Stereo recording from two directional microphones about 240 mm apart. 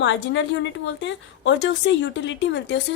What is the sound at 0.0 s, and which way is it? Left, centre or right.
A woman's voice, left.